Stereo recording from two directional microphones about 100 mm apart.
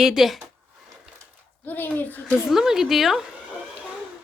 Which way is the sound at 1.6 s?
20° left (ahead or behind).